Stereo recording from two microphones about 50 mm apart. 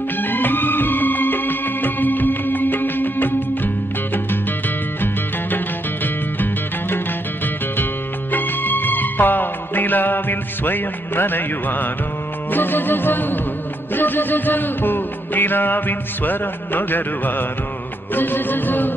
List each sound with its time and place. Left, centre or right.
0.2 s music: left
8.3 s music: left